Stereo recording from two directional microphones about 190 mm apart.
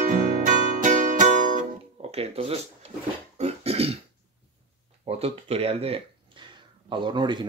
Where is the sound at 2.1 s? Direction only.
30° right (ahead or behind).